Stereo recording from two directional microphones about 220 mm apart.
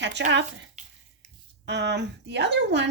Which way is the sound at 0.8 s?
30° right (ahead or behind).